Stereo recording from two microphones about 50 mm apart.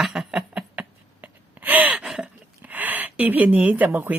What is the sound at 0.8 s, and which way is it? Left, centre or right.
Gasp, right.